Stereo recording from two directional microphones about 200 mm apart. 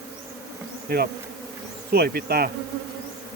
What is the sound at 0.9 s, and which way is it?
Insect, 50° right (ahead or behind).